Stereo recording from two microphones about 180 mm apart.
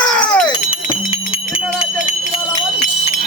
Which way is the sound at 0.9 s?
30° left (ahead or behind).